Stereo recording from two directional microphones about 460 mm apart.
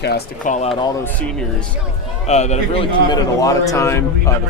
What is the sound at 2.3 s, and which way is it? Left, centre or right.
A man's voice, centre.